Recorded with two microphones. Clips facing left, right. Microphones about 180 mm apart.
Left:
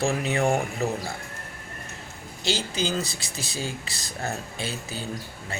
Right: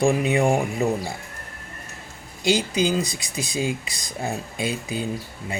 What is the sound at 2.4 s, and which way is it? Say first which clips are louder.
Speech: right 7 dB; 15° right (ahead or behind).